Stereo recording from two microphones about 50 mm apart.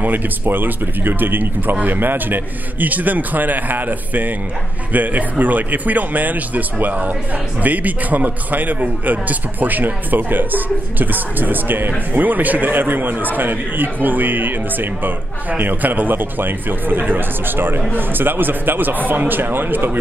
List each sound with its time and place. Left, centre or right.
0.0 s speech: right